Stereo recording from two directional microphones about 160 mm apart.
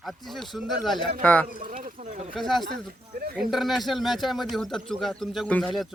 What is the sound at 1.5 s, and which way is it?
Speech, 55° right (ahead or behind).